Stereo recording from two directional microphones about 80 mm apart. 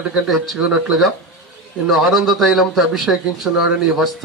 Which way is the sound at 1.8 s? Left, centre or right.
Centre.